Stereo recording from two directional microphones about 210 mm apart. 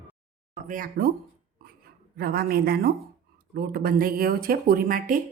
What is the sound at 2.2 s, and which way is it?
A woman's voice, 45° right (ahead or behind).